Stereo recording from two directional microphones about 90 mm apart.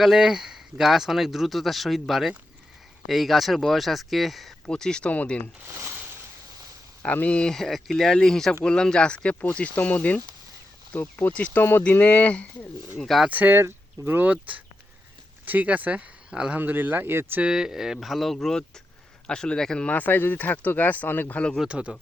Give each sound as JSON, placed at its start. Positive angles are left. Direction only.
{"t": 0.0, "sound": "speech", "side_deg": -5}
{"t": 5.7, "sound": "a sound", "side_deg": -25}
{"t": 7.0, "sound": "speech", "side_deg": 15}
{"t": 13.0, "sound": "speech", "side_deg": 0}
{"t": 13.2, "sound": "speech", "side_deg": -20}
{"t": 17.4, "sound": "speech", "side_deg": -5}
{"t": 21.6, "sound": "speech", "side_deg": -10}